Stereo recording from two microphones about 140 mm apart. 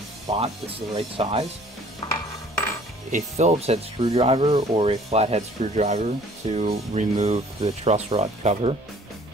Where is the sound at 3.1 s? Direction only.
60° right (ahead or behind).